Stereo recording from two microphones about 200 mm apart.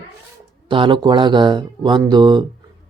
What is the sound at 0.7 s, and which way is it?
Speech, 25° right (ahead or behind).